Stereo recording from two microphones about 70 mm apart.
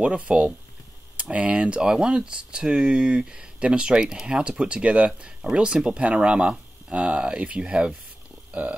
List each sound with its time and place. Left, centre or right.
0.0 s speech: centre